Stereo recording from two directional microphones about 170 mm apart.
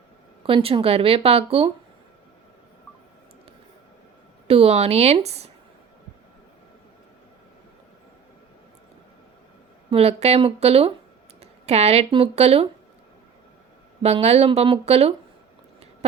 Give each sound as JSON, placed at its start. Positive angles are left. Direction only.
{"t": 0.4, "sound": "speech", "side_deg": -30}
{"t": 4.4, "sound": "speech", "side_deg": -35}
{"t": 9.9, "sound": "speech", "side_deg": -35}
{"t": 14.0, "sound": "speech", "side_deg": -40}